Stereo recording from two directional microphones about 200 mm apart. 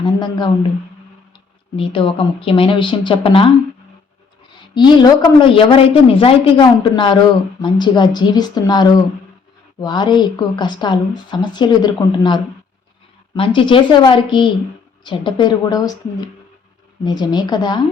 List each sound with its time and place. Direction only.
0.0 s a woman's voice: 20° left (ahead or behind)
4.7 s a woman's voice: 20° left (ahead or behind)